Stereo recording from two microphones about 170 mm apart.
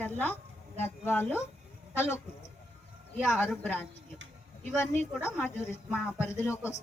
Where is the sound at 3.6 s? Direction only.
10° left (ahead or behind).